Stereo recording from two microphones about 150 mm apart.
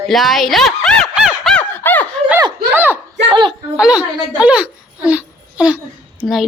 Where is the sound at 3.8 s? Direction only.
5° right (ahead or behind).